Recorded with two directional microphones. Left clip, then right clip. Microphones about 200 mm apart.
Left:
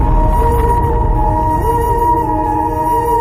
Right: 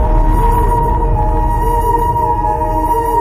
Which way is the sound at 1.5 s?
Centre (ahead or behind).